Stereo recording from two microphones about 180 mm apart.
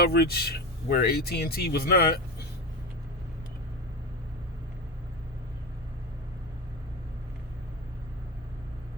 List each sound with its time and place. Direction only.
0.0 s speech: 60° left (ahead or behind)